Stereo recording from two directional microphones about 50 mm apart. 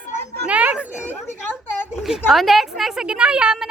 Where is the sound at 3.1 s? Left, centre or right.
Right.